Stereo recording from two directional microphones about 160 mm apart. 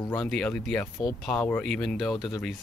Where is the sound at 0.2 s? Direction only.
5° left (ahead or behind).